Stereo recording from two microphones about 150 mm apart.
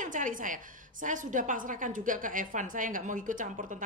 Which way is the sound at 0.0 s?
60° right (ahead or behind).